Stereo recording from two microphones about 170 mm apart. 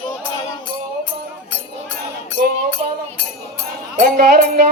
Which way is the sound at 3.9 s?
60° right (ahead or behind).